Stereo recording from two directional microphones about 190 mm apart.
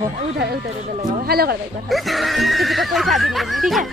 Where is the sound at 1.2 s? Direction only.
55° right (ahead or behind).